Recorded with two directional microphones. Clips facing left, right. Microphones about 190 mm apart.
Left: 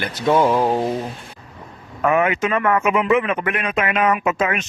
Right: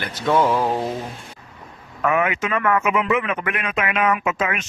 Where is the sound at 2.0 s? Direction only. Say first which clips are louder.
Left 3 dB; 30° left (ahead or behind).